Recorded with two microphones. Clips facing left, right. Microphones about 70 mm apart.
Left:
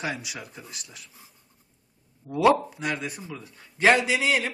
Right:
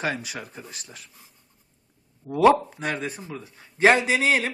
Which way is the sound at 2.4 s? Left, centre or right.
Right.